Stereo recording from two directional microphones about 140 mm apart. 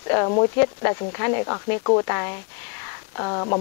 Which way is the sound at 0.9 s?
25° left (ahead or behind).